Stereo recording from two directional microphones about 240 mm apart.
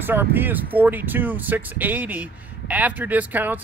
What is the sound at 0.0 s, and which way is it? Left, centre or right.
Speech, centre.